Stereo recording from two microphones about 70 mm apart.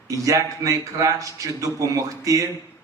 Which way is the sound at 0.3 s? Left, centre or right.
Right.